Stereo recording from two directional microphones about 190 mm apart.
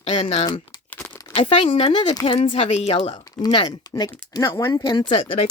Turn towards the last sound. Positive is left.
turn(degrees=25)  # may be behind; listen again after turning